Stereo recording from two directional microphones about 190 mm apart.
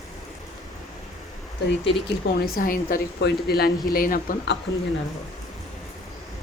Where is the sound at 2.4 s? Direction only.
50° left (ahead or behind).